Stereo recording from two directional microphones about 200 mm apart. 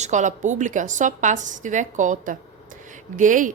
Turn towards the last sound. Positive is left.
turn(degrees=-40)  # may be behind; listen again after turning